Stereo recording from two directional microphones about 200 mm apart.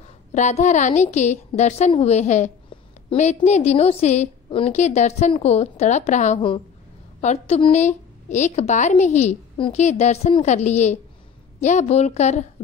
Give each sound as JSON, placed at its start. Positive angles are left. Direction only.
{"t": 0.3, "sound": "a woman's voice", "side_deg": 35}